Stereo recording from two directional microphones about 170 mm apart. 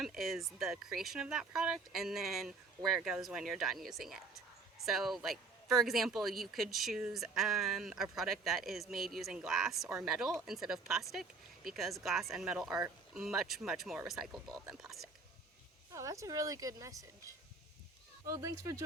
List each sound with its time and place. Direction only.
0.0 s speech: centre (ahead or behind)
15.9 s a woman's voice: 20° right (ahead or behind)